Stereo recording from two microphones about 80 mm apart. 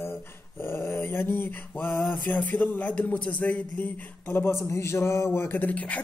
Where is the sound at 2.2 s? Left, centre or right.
Left.